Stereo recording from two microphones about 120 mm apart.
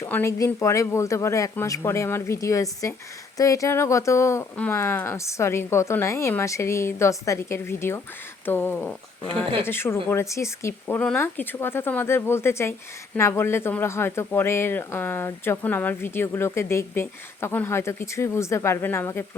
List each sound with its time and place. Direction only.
0.1 s speech: 20° left (ahead or behind)